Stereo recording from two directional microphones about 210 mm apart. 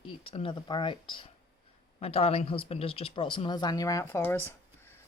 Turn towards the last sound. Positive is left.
turn(degrees=10)  # may be behind; listen again after turning